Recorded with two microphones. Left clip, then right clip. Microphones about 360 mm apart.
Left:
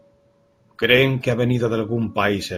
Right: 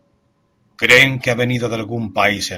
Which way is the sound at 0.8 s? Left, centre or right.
Centre.